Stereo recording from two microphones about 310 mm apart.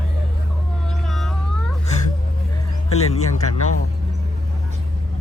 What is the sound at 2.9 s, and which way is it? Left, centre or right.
Music, left.